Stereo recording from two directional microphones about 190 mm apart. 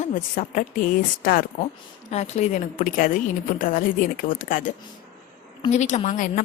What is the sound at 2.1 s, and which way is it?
A woman's voice, 35° left (ahead or behind).